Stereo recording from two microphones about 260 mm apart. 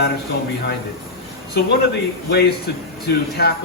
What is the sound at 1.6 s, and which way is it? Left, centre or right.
Speech, left.